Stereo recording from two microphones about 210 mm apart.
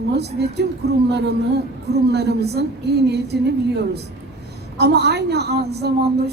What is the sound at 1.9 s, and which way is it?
A woman's voice, 50° right (ahead or behind).